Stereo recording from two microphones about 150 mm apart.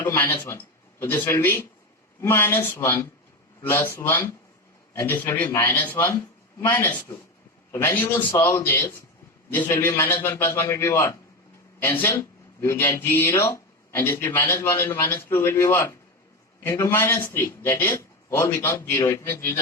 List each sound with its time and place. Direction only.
0.0 s speech: 15° left (ahead or behind)